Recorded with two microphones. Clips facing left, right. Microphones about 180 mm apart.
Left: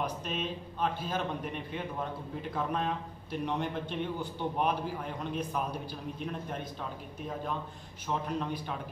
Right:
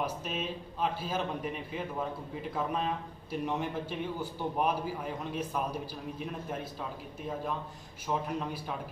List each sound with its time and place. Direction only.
0.0 s a man's voice: 5° right (ahead or behind)
8.1 s a man's voice: 5° right (ahead or behind)